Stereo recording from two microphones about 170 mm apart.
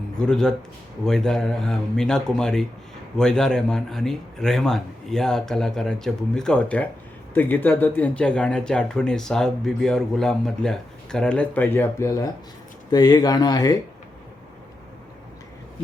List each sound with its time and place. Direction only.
0.2 s speech: 5° left (ahead or behind); by 13.7 s 20° left (ahead or behind)